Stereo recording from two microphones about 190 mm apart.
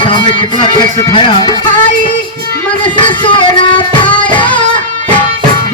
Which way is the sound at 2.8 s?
25° left (ahead or behind).